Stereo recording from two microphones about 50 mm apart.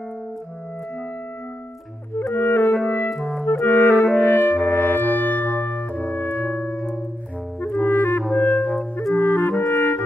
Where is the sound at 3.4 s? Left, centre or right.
Left.